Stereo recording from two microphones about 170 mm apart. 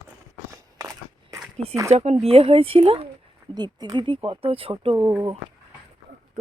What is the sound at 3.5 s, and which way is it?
Speech, 25° right (ahead or behind).